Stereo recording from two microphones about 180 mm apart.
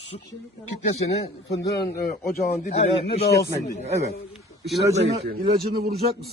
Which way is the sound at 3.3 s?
60° left (ahead or behind).